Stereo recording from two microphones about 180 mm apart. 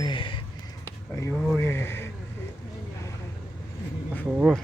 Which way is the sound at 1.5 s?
15° left (ahead or behind).